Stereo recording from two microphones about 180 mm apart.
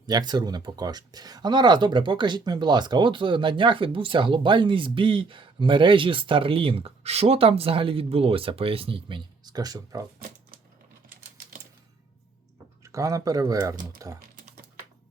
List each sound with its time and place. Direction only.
0.0 s speech: 25° right (ahead or behind)
10.2 s typewriter: 55° right (ahead or behind)
12.8 s speech: 15° right (ahead or behind)
14.2 s typing: 55° right (ahead or behind)